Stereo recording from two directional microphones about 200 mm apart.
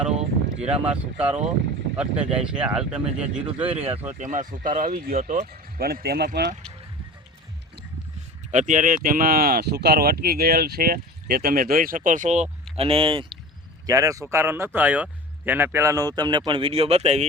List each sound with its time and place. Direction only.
0.6 s speech: 5° right (ahead or behind)
3.7 s speech: 30° right (ahead or behind)
4.2 s speech: 40° right (ahead or behind)
8.4 s speech: 40° right (ahead or behind)
13.8 s speech: 15° right (ahead or behind); by 17.2 s 30° right (ahead or behind)